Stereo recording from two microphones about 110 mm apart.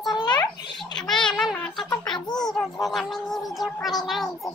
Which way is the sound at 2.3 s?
40° left (ahead or behind).